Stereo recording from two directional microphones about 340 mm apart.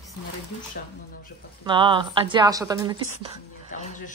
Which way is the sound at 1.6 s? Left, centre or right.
Centre.